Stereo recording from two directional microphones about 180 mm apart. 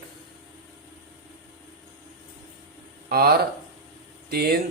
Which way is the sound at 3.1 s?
60° right (ahead or behind).